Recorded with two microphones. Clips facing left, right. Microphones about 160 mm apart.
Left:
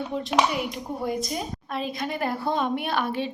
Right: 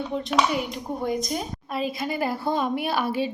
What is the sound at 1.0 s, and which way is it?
A woman's voice, centre (ahead or behind).